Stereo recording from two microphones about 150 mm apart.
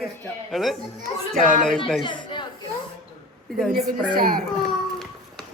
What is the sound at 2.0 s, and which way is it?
Speech, 30° left (ahead or behind).